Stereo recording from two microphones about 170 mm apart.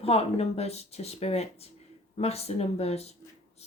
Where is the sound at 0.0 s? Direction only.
35° left (ahead or behind).